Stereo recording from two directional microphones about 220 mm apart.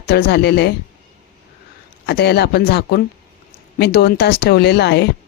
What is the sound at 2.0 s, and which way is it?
Speech, 50° left (ahead or behind).